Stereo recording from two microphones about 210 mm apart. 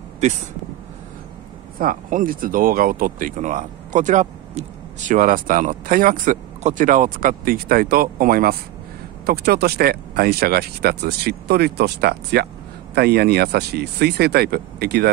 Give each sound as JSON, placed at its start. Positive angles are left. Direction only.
{"t": 1.8, "sound": "speech", "side_deg": -40}